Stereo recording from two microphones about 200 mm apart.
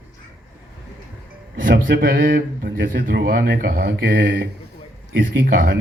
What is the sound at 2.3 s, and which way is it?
Mantra, 65° right (ahead or behind).